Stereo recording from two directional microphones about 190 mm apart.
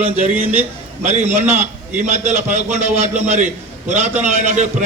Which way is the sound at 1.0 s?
40° right (ahead or behind).